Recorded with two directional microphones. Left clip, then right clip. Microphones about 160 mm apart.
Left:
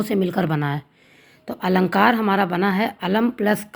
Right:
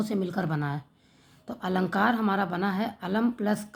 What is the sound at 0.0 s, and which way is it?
A woman's voice, 20° left (ahead or behind).